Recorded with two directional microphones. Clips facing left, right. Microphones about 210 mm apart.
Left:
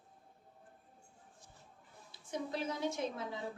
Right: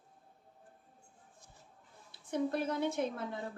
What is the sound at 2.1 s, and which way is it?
A woman's voice, 60° right (ahead or behind).